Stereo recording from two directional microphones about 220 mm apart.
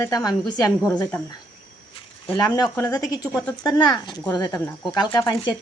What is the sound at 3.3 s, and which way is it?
Speech, 5° left (ahead or behind).